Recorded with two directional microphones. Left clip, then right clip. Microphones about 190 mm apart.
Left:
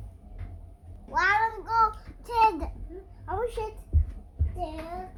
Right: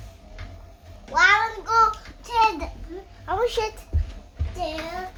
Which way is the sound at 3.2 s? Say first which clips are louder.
Right 7 dB; 20° right (ahead or behind).